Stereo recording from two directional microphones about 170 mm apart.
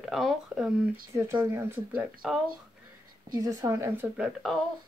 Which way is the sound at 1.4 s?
15° right (ahead or behind).